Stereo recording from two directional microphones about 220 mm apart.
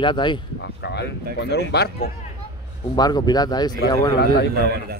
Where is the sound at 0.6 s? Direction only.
50° left (ahead or behind).